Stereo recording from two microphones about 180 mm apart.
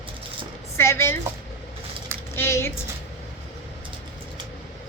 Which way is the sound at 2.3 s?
15° left (ahead or behind).